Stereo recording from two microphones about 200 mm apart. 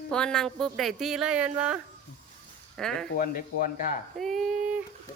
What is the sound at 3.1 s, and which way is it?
Speech, 45° left (ahead or behind).